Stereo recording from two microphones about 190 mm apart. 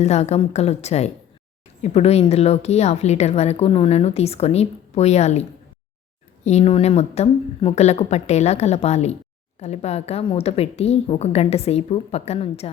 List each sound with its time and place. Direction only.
0.0 s a woman's voice: 35° left (ahead or behind)